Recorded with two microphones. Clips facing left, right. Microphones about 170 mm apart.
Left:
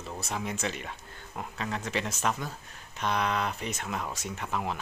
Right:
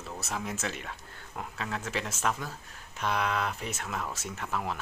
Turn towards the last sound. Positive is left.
turn(degrees=0)  # may be behind; listen again after turning